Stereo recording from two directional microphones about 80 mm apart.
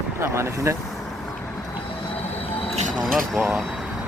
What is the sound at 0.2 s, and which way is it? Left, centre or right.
Speech, right.